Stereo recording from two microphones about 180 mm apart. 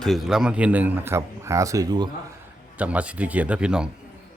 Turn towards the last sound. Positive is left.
turn(degrees=-5)  # may be behind; listen again after turning